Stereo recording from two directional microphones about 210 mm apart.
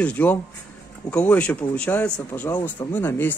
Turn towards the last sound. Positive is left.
turn(degrees=10)  # may be behind; listen again after turning